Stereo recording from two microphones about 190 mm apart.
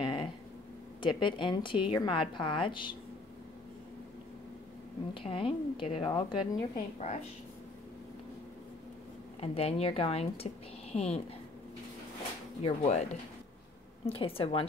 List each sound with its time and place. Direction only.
0.0 s a sound: 25° left (ahead or behind)
1.0 s a woman's voice: 25° left (ahead or behind)
5.1 s a woman's voice: 30° left (ahead or behind)
9.4 s speech: 30° left (ahead or behind)
12.6 s speech: 35° left (ahead or behind)
14.0 s a woman's voice: 30° left (ahead or behind)